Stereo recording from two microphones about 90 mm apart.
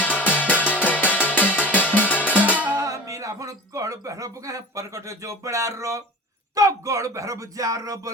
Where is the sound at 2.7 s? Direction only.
40° right (ahead or behind).